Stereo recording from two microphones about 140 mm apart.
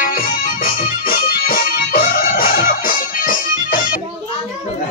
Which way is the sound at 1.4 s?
90° left.